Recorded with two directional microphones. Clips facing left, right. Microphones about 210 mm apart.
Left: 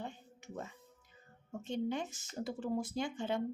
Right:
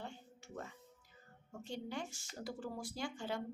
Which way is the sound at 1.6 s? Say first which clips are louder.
Left 7 dB; 20° left (ahead or behind).